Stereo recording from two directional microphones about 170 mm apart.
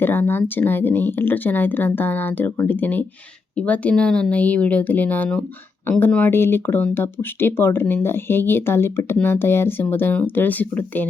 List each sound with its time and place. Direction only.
0.0 s speech: 10° left (ahead or behind)